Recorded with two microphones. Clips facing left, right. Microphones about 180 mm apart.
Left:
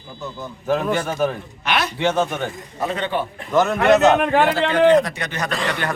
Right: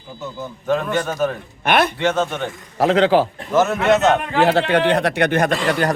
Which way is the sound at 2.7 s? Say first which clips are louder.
Right 10 dB; 90° right.